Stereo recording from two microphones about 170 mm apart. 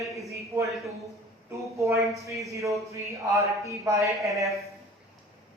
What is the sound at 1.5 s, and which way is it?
Speech, 15° right (ahead or behind).